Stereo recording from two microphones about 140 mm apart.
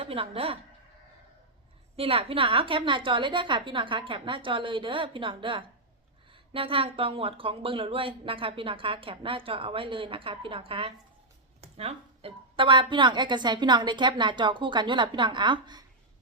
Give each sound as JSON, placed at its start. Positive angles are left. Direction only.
{"t": 0.0, "sound": "a woman's voice", "side_deg": -40}
{"t": 2.0, "sound": "speech", "side_deg": -45}